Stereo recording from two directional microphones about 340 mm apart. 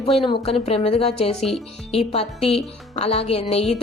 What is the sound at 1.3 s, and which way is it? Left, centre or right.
Speech, centre.